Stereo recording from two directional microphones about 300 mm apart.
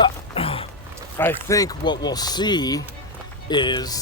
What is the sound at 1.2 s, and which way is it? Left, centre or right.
Speech, centre.